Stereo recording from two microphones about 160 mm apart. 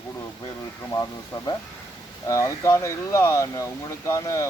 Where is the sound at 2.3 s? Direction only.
20° left (ahead or behind).